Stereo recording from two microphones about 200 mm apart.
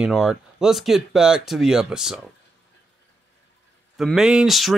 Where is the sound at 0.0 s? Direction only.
5° right (ahead or behind).